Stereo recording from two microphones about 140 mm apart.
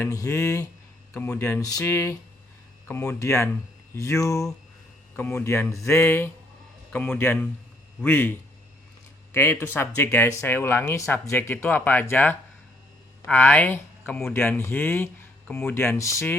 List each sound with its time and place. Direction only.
0.0 s speech: 20° left (ahead or behind)
1.4 s speech: 20° left (ahead or behind)
9.3 s speech: 15° left (ahead or behind)